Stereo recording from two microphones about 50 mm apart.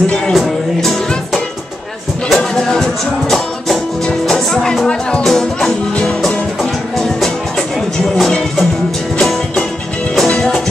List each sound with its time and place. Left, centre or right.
0.3 s music: centre
10.2 s music: centre